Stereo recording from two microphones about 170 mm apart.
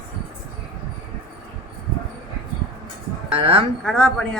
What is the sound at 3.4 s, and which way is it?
Speech, 30° right (ahead or behind).